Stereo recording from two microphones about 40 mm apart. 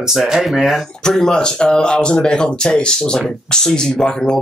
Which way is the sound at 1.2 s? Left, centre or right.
Centre.